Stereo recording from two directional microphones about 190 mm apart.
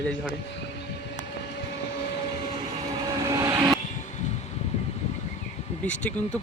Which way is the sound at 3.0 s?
20° right (ahead or behind).